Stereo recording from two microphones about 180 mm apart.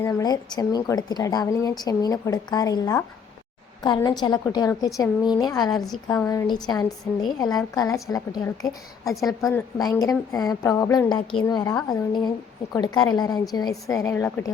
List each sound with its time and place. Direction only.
0.0 s a woman's voice: 20° left (ahead or behind)